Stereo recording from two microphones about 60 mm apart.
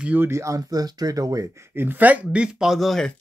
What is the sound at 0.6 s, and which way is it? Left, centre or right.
Speech, right.